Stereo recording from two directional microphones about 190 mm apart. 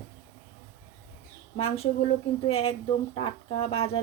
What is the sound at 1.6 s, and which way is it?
Speech, 30° left (ahead or behind).